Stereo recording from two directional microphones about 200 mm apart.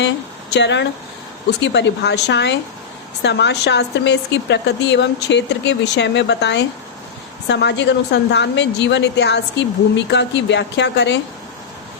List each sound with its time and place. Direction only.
0.5 s a woman's voice: 60° left (ahead or behind)